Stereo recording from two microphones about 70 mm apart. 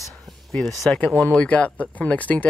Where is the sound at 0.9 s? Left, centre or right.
Left.